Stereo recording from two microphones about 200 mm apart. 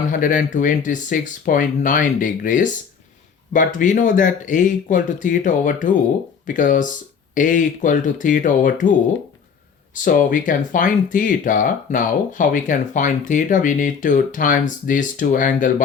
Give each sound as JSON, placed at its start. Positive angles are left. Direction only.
{"t": 0.1, "sound": "speech", "side_deg": 40}
{"t": 9.9, "sound": "speech", "side_deg": 40}